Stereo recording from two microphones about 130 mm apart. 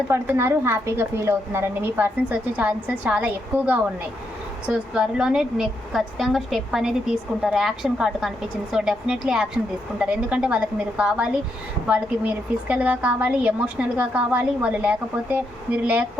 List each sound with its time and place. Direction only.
0.1 s a woman's voice: 20° right (ahead or behind)